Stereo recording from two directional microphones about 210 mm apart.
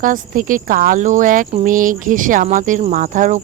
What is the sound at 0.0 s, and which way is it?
Speech, 40° right (ahead or behind).